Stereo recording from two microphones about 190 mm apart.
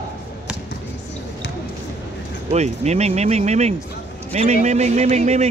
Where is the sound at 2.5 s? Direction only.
35° right (ahead or behind).